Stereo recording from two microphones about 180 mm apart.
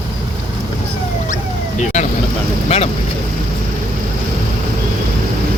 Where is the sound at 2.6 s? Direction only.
35° left (ahead or behind).